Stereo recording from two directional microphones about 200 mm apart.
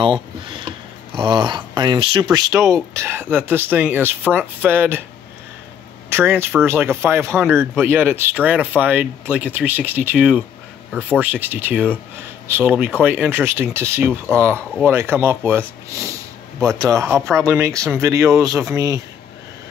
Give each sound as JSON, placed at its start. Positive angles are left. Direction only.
{"t": 0.5, "sound": "speech", "side_deg": -25}
{"t": 6.0, "sound": "speech", "side_deg": -10}